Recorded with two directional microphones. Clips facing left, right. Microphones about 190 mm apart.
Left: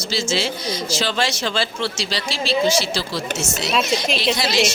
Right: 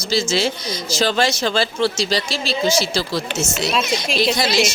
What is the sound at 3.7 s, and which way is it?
Speech, centre (ahead or behind).